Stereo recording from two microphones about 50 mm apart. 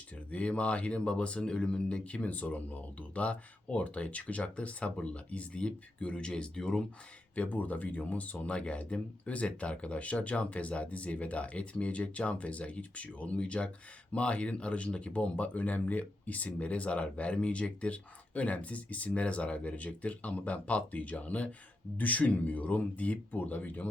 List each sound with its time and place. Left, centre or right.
0.3 s speech: left
7.3 s speech: left